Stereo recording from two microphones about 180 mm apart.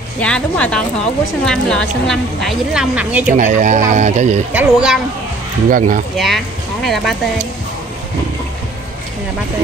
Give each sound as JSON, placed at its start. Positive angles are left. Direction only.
{"t": 0.2, "sound": "a woman's voice", "side_deg": 5}
{"t": 3.3, "sound": "speech", "side_deg": -45}
{"t": 4.5, "sound": "speech", "side_deg": -5}
{"t": 5.7, "sound": "speech", "side_deg": -50}
{"t": 6.1, "sound": "speech", "side_deg": 0}